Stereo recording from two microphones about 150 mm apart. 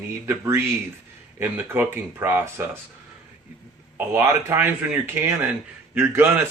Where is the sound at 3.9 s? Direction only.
15° right (ahead or behind).